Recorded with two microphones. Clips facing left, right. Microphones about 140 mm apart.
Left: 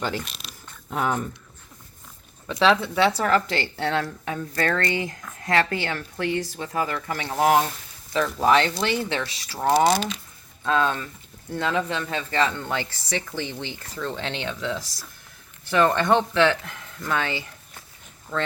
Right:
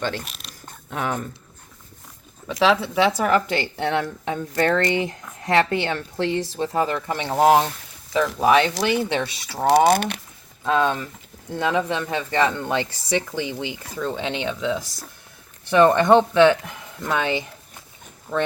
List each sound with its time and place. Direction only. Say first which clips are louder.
0.3 s a sound: even; centre (ahead or behind)
2.5 s speech: right 1 dB; 10° right (ahead or behind)
8.4 s speech: right 2 dB; 10° right (ahead or behind)
9.9 s speech: right 4 dB; 60° right (ahead or behind)
10.7 s speech: right 2 dB; 20° right (ahead or behind)